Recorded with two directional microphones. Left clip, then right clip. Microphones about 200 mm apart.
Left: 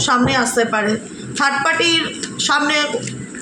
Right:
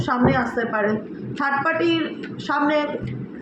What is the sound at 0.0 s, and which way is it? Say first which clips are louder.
A woman's voice: left 5 dB; 55° left (ahead or behind).